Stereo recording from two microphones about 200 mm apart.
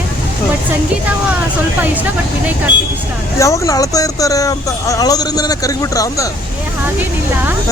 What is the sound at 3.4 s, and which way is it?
Speech, 15° left (ahead or behind).